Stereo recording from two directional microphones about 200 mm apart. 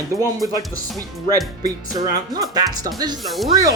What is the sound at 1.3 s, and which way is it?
Speech, 20° right (ahead or behind).